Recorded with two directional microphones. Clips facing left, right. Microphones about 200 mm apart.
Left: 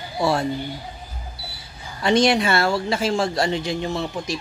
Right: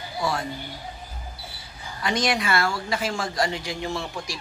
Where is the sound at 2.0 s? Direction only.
30° left (ahead or behind).